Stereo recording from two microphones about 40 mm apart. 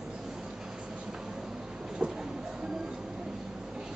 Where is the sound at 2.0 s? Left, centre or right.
Right.